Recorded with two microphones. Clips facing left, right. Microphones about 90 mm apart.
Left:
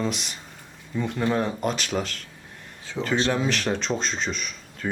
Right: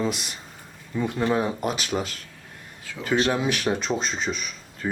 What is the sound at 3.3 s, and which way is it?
Speech, 10° right (ahead or behind).